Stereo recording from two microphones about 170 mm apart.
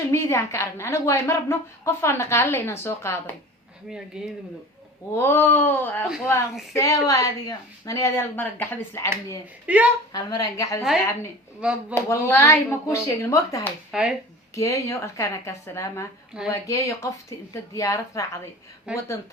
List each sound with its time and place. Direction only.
0.1 s a woman's voice: 15° left (ahead or behind)
3.8 s speech: 5° right (ahead or behind)
5.1 s a woman's voice: 15° left (ahead or behind)
9.7 s a woman's voice: 5° right (ahead or behind)
10.1 s a woman's voice: 25° left (ahead or behind)
11.6 s a woman's voice: 5° right (ahead or behind)
12.0 s a woman's voice: 15° left (ahead or behind)
13.9 s speech: 5° right (ahead or behind)
14.5 s a woman's voice: 20° left (ahead or behind)
18.9 s a woman's voice: 5° right (ahead or behind)